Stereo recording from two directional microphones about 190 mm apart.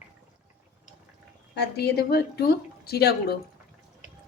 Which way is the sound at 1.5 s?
60° left (ahead or behind).